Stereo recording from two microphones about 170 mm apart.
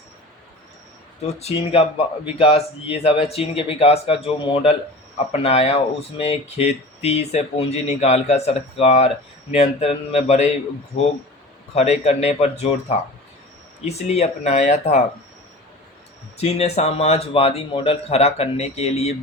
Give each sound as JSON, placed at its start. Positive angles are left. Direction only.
{"t": 1.2, "sound": "speech", "side_deg": 40}
{"t": 16.4, "sound": "speech", "side_deg": 40}